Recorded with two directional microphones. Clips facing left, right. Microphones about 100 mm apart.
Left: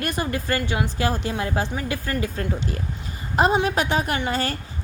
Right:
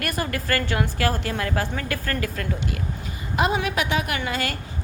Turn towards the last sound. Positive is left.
turn(degrees=35)  # may be behind; listen again after turning